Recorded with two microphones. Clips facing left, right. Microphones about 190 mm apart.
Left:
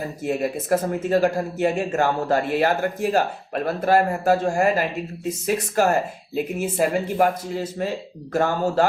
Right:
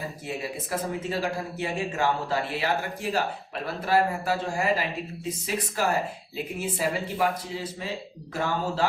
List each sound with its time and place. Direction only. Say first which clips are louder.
0.3 s speech: left 11 dB; 50° left (ahead or behind)